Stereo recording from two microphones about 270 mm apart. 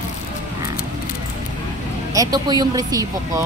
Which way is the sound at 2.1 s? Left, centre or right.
Centre.